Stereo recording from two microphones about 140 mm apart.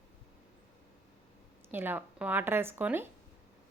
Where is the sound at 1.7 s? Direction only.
15° right (ahead or behind).